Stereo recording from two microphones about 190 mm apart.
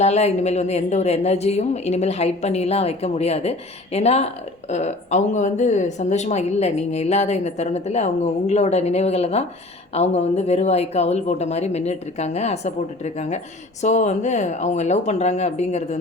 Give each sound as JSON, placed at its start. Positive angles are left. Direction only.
{"t": 0.0, "sound": "speech", "side_deg": 35}
{"t": 13.8, "sound": "speech", "side_deg": 40}